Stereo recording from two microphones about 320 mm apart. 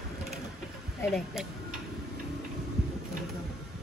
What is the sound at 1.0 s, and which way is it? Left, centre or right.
Speech, centre.